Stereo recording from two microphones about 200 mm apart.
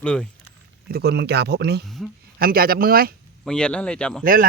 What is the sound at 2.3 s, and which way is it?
Speech, 50° right (ahead or behind).